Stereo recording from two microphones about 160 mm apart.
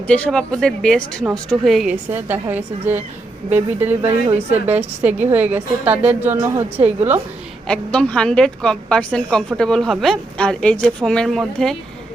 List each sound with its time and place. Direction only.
0.1 s speech: 5° left (ahead or behind)
2.0 s a woman's voice: 10° right (ahead or behind)
6.3 s a woman's voice: 25° right (ahead or behind)
6.7 s a woman's voice: 10° right (ahead or behind)
7.7 s speech: 5° left (ahead or behind)